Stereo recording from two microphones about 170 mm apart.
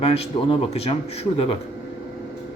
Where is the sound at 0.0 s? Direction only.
35° left (ahead or behind).